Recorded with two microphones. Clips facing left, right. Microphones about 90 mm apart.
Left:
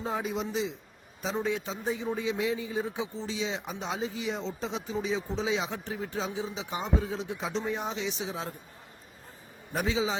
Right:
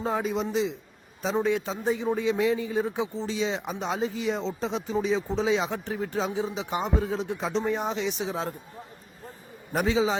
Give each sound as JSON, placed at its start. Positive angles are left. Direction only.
{"t": 0.0, "sound": "a man's voice", "side_deg": -70}
{"t": 5.7, "sound": "speech", "side_deg": -55}
{"t": 9.7, "sound": "speech", "side_deg": -60}